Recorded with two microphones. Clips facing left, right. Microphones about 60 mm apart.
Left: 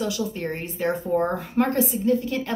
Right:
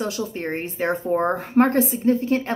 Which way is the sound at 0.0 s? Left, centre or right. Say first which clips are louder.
Even; right.